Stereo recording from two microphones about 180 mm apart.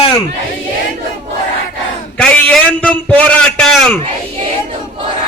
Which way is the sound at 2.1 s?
5° left (ahead or behind).